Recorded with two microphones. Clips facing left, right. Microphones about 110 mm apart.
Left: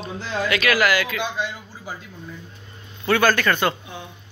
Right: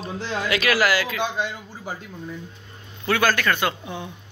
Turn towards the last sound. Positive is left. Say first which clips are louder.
# left 2 dB
turn(degrees=-5)  # may be behind; listen again after turning